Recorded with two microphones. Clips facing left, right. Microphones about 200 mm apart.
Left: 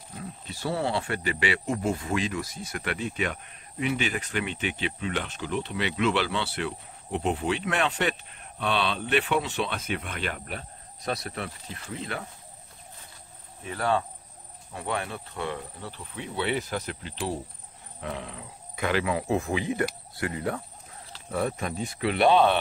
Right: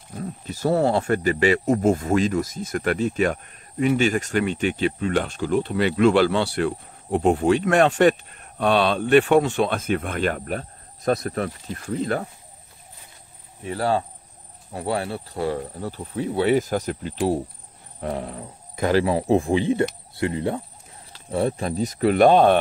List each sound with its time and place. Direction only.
0.2 s speech: 45° right (ahead or behind)
13.7 s speech: 30° right (ahead or behind); by 22.6 s 45° right (ahead or behind)